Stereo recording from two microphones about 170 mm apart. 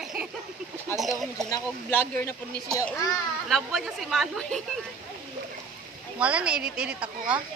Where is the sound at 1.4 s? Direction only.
20° left (ahead or behind).